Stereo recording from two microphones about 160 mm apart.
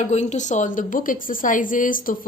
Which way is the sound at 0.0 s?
45° left (ahead or behind).